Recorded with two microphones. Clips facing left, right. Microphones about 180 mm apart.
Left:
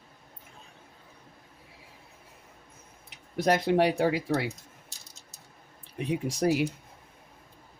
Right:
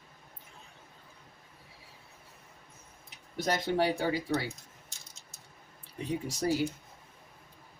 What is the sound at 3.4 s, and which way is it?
Speech, 70° left (ahead or behind).